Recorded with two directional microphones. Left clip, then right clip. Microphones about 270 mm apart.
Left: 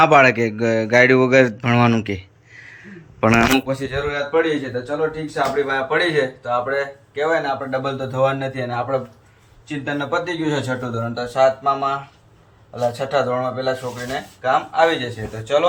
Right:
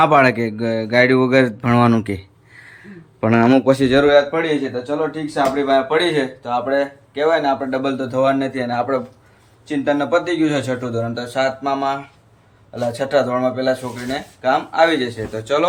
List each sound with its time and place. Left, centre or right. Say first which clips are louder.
0.0 s speech: left 1 dB; centre
3.7 s speech: right 10 dB; right
4.9 s speech: left 1 dB; centre